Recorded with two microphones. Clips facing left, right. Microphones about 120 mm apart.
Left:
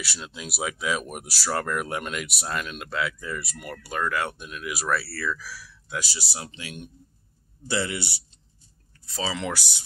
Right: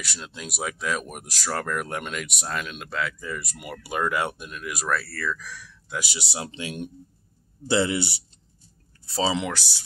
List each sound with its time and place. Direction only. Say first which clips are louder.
0.0 s speech: even; centre (ahead or behind)
4.5 s speech: even; centre (ahead or behind)
5.9 s speech: right 2 dB; 25° right (ahead or behind)
9.5 s speech: even; 15° left (ahead or behind)